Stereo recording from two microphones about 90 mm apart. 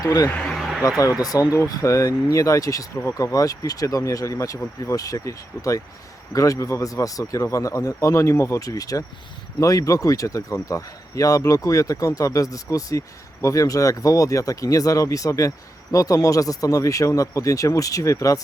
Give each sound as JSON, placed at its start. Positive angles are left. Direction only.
{"t": 0.0, "sound": "speech", "side_deg": 40}
{"t": 0.3, "sound": "speech", "side_deg": 15}
{"t": 0.8, "sound": "speech", "side_deg": 40}
{"t": 3.0, "sound": "speech", "side_deg": 30}
{"t": 3.3, "sound": "speech", "side_deg": 40}